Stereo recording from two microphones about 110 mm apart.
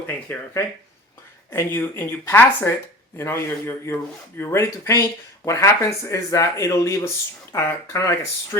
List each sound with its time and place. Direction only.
0.3 s speech: 15° left (ahead or behind)
1.5 s speech: 20° left (ahead or behind)